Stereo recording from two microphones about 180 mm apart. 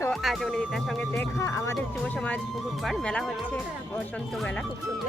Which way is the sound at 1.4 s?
15° left (ahead or behind).